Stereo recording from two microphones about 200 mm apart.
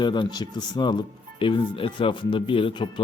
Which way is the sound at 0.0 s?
20° left (ahead or behind).